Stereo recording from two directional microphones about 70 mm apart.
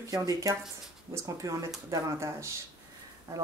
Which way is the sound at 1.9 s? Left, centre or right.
Right.